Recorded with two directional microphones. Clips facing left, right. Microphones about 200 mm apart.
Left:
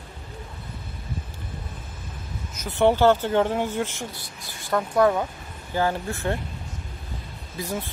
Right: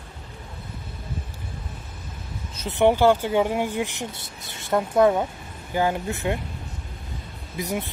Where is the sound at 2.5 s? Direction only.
20° right (ahead or behind).